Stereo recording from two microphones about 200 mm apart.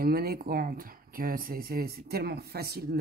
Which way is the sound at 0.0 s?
50° right (ahead or behind).